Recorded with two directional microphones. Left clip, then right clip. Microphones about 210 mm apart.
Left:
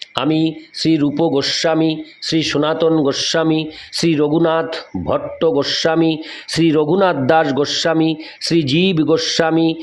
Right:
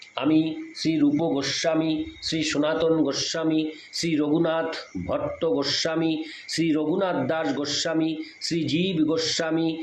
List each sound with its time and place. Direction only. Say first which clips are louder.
0.2 s speech: left 6 dB; 50° left (ahead or behind)